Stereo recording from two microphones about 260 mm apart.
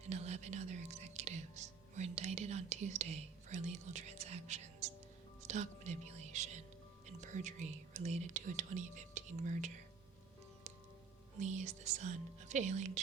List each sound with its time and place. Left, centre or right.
0.0 s music: right
5.5 s speech: right
11.3 s speech: right